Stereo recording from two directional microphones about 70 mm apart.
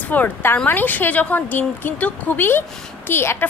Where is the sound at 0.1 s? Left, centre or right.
Left.